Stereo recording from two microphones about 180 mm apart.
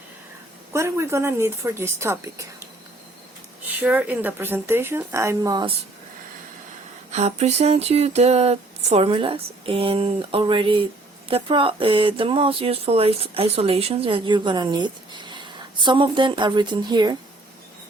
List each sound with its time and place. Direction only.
0.7 s a woman's voice: 15° right (ahead or behind)
3.8 s a woman's voice: 10° right (ahead or behind)
7.1 s a sound: 35° right (ahead or behind)
11.3 s speech: 30° right (ahead or behind)